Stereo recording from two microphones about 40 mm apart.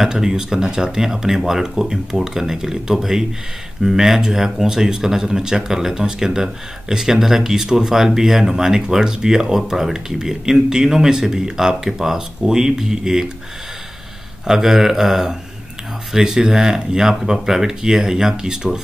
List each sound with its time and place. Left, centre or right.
0.0 s speech: centre
14.4 s speech: centre